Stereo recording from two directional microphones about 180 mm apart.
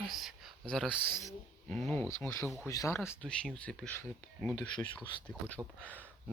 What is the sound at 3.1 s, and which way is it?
Speech, 5° left (ahead or behind).